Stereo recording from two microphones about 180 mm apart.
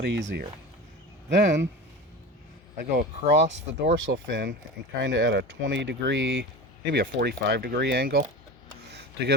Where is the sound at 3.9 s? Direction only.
90° right.